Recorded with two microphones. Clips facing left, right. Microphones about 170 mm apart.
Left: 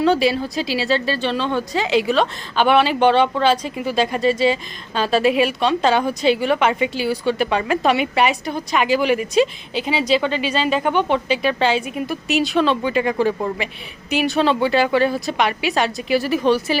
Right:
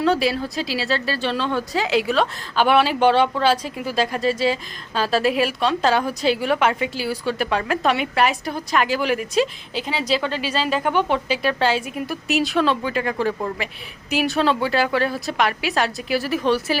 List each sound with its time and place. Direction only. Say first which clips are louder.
0.0 s a woman's voice: left 3 dB; centre (ahead or behind)